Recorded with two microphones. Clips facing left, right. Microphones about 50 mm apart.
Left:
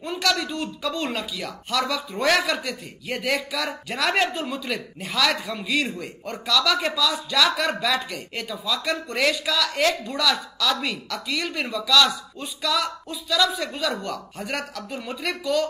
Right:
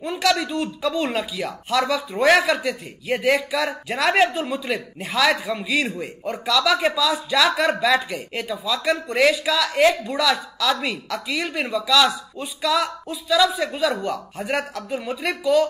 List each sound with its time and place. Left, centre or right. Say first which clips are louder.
0.0 s speech: right 3 dB; centre